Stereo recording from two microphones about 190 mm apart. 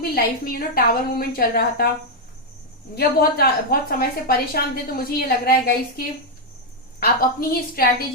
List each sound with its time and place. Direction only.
0.1 s a woman's voice: 50° left (ahead or behind)
2.9 s a woman's voice: 55° left (ahead or behind)
7.0 s a woman's voice: 50° left (ahead or behind)